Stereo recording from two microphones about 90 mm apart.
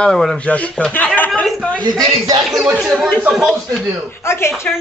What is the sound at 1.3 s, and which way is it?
Speech, 5° left (ahead or behind).